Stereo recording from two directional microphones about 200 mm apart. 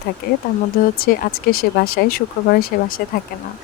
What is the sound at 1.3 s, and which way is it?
Speech, 90° left.